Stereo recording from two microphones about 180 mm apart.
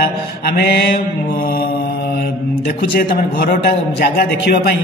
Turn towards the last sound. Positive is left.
turn(degrees=60)  # may be behind; listen again after turning